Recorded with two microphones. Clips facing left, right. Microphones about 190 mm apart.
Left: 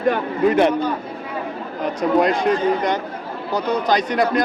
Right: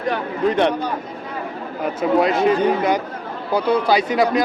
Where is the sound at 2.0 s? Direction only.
Centre (ahead or behind).